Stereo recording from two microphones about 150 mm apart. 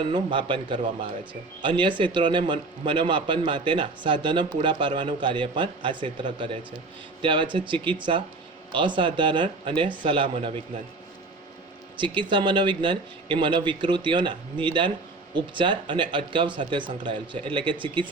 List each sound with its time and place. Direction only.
0.0 s a man's voice: 35° right (ahead or behind)
11.9 s a man's voice: 35° right (ahead or behind)